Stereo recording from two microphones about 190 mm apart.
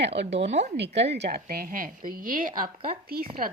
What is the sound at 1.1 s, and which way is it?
A woman's voice, 60° right (ahead or behind).